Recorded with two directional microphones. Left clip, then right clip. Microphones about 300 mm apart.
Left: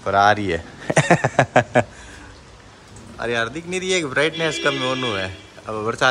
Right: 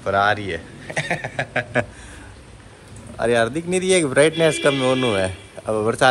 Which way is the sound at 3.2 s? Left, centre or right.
Centre.